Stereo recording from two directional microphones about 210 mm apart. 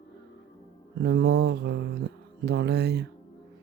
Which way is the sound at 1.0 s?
50° right (ahead or behind).